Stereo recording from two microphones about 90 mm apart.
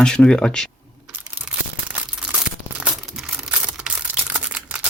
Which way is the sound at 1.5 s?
10° right (ahead or behind).